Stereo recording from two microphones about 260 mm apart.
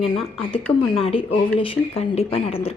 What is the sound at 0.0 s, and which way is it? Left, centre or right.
A woman's voice, left.